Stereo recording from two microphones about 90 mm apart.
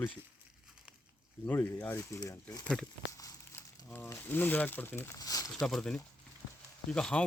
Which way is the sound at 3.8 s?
25° left (ahead or behind).